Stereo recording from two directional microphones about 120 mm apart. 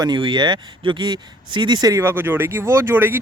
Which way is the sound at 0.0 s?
40° right (ahead or behind).